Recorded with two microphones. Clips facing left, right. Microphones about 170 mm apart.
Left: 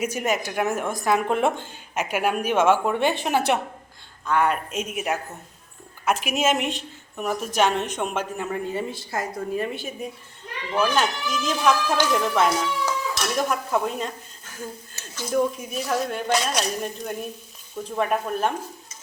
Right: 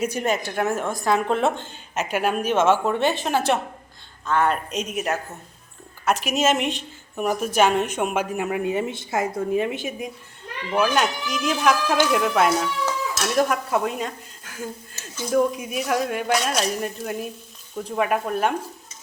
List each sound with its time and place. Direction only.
0.0 s a woman's voice: 10° left (ahead or behind)
6.2 s a woman's voice: 10° left (ahead or behind); by 8.8 s 10° right (ahead or behind)
8.9 s a woman's voice: 25° right (ahead or behind); by 14.1 s 5° right (ahead or behind)
15.2 s speech: centre (ahead or behind)